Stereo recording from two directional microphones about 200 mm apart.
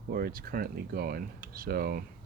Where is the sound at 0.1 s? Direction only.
45° right (ahead or behind).